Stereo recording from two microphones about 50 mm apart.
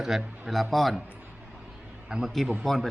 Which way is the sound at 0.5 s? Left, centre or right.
Centre.